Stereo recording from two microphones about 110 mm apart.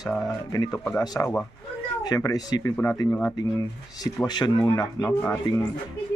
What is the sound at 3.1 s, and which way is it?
Speech, 15° left (ahead or behind).